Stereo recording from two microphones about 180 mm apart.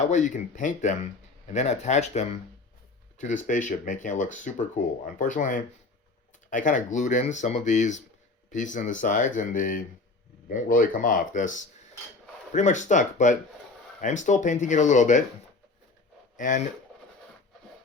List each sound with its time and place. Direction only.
0.0 s speech: 45° left (ahead or behind)
16.4 s speech: 45° left (ahead or behind)